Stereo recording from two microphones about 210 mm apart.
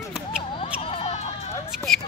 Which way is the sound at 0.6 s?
30° left (ahead or behind).